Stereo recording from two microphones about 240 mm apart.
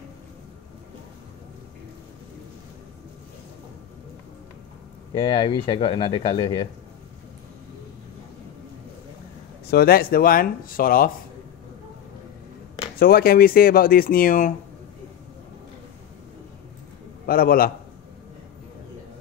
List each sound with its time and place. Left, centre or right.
5.1 s speech: left
9.7 s speech: left
13.0 s speech: left
17.3 s speech: left